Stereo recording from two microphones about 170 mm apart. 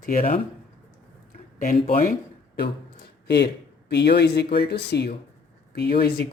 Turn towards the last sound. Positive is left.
turn(degrees=70)  # may be behind; listen again after turning